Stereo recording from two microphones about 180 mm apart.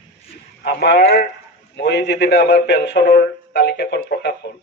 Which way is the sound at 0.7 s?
70° left (ahead or behind).